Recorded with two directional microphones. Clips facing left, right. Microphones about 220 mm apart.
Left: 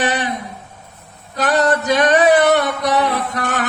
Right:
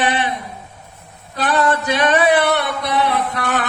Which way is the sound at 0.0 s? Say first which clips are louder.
Even; 45° left (ahead or behind).